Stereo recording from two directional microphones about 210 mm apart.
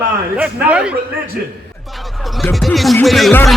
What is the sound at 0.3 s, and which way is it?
Speech, 5° right (ahead or behind).